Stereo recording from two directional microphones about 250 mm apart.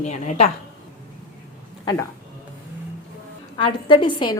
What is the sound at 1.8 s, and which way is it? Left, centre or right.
Speech, centre.